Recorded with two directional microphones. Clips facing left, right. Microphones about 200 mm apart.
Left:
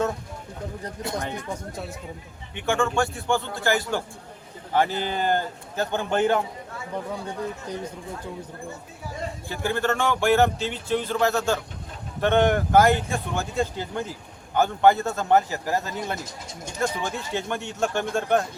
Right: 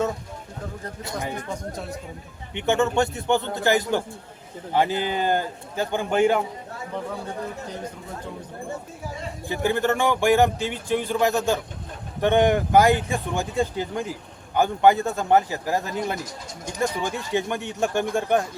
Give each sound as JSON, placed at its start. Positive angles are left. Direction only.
{"t": 2.6, "sound": "a man's voice", "side_deg": -20}
{"t": 9.5, "sound": "speech", "side_deg": -15}